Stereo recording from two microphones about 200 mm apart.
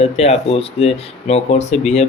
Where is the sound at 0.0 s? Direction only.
30° left (ahead or behind).